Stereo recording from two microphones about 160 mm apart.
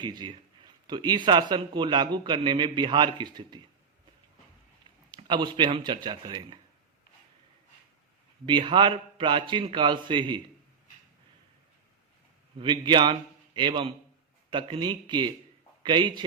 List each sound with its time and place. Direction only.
0.0 s a man's voice: 25° right (ahead or behind)
5.1 s a man's voice: 30° right (ahead or behind)
8.4 s a man's voice: 30° right (ahead or behind)
12.5 s a man's voice: 30° right (ahead or behind)